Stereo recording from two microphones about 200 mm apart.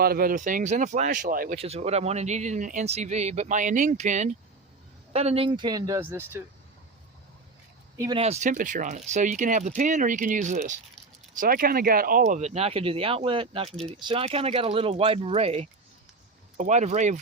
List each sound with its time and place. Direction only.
0.0 s speech: 50° right (ahead or behind)
1.5 s speech: 30° right (ahead or behind); by 6.4 s 10° right (ahead or behind)
7.9 s speech: 20° right (ahead or behind)
8.2 s speech: 35° right (ahead or behind)